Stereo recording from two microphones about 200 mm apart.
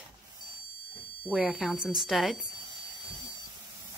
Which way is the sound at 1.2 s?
5° right (ahead or behind).